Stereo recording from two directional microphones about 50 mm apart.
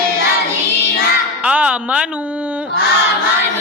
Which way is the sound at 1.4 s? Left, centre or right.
Right.